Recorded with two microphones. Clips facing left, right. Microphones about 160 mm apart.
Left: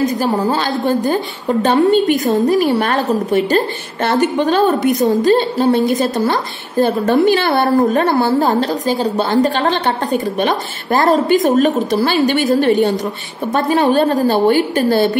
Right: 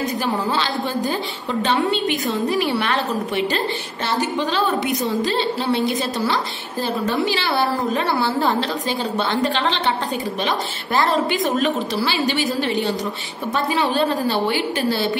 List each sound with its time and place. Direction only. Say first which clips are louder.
0.2 s a woman's voice: left 6 dB; 45° left (ahead or behind)